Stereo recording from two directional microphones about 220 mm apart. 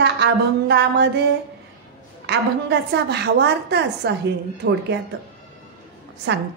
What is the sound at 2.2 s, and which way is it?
A woman's voice, 50° right (ahead or behind).